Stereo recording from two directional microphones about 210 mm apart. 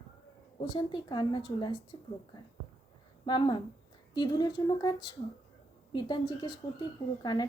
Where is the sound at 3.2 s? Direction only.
20° left (ahead or behind).